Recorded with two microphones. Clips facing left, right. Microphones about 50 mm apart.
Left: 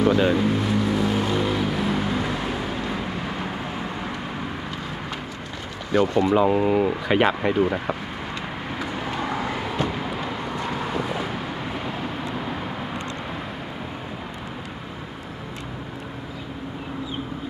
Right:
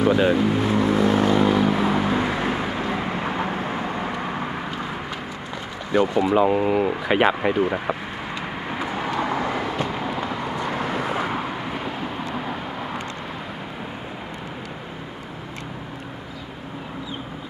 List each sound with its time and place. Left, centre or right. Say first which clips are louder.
0.0 s speech: right 1 dB; centre
0.6 s vehicle: right 3 dB; right
5.9 s speech: even; centre